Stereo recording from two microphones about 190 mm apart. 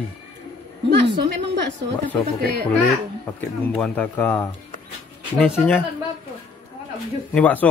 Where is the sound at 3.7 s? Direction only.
10° left (ahead or behind).